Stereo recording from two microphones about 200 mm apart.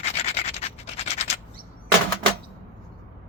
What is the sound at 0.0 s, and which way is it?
Scratch, 30° left (ahead or behind).